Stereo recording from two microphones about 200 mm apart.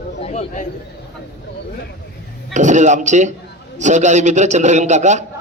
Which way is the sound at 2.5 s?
35° right (ahead or behind).